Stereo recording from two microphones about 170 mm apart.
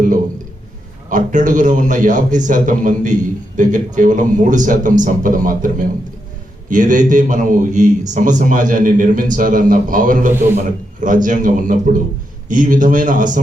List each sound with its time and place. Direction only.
1.1 s a man's voice: 50° right (ahead or behind)